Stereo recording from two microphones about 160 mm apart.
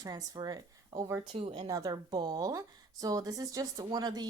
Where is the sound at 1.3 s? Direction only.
35° right (ahead or behind).